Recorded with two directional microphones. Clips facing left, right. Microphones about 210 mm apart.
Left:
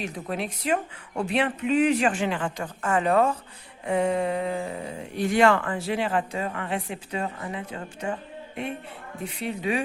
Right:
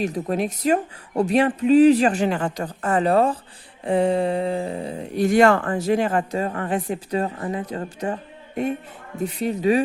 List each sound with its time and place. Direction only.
0.0 s speech: 40° right (ahead or behind)
9.2 s speech: 40° right (ahead or behind)